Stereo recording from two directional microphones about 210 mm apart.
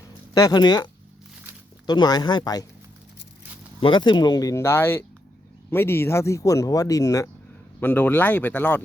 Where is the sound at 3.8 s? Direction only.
20° left (ahead or behind); by 8.8 s 5° left (ahead or behind).